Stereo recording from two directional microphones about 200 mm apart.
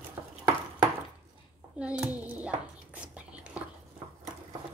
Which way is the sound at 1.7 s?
5° right (ahead or behind).